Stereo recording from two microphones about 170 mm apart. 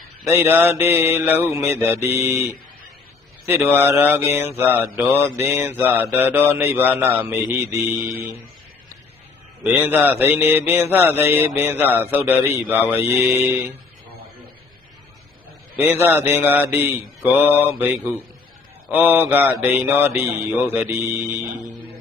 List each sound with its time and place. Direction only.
0.3 s mantra: 10° right (ahead or behind)
3.4 s mantra: 10° right (ahead or behind)
9.6 s mantra: 10° right (ahead or behind)
15.8 s mantra: 10° right (ahead or behind)